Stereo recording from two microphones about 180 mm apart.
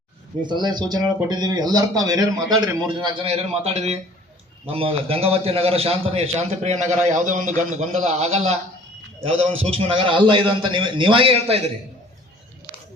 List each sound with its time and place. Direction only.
0.4 s a man's voice: 25° right (ahead or behind)
9.6 s speech: 30° right (ahead or behind)
12.7 s a sound: 5° right (ahead or behind)